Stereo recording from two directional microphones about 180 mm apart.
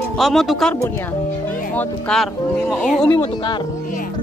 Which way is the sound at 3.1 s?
25° left (ahead or behind).